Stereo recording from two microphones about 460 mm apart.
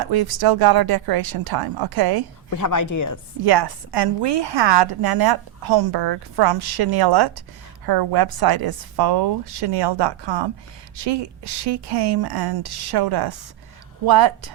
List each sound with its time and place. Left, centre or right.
0.0 s a woman's voice: right
2.5 s a woman's voice: left
3.4 s a woman's voice: right